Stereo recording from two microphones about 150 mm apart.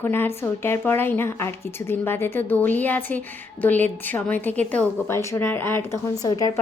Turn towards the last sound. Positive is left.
turn(degrees=25)  # may be behind; listen again after turning